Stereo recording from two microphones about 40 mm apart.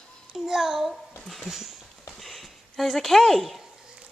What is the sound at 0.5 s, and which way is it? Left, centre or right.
Speech, centre.